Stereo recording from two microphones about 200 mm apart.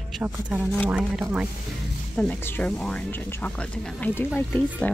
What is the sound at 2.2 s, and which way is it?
Speech, 10° left (ahead or behind).